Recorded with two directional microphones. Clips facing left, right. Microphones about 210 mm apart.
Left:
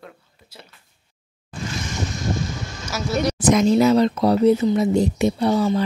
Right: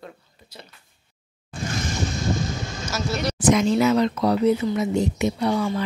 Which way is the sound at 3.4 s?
40° left (ahead or behind).